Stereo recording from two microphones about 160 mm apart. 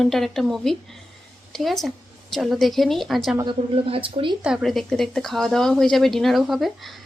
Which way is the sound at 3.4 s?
30° right (ahead or behind).